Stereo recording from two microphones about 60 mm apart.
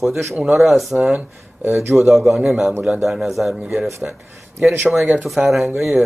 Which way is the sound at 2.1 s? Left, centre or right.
Centre.